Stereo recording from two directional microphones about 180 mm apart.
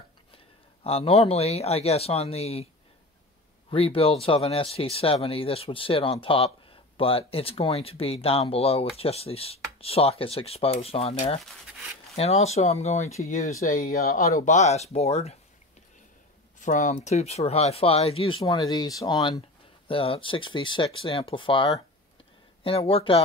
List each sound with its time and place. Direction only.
0.8 s speech: 35° left (ahead or behind)
3.7 s speech: 30° left (ahead or behind); by 14.2 s 55° left (ahead or behind)
14.4 s speech: 40° left (ahead or behind)
16.5 s speech: 45° left (ahead or behind)